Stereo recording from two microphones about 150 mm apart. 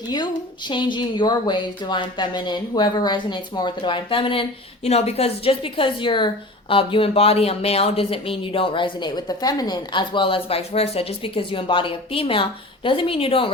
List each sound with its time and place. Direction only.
0.7 s a woman's voice: 30° left (ahead or behind)